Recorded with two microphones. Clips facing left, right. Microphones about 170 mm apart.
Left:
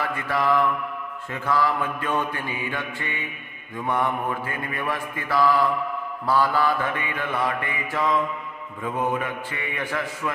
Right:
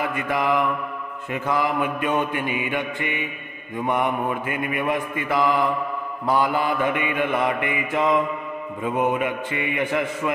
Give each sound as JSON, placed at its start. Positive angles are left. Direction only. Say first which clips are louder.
{"t": 0.0, "sound": "mantra", "louder": "right 1 dB", "side_deg": -20}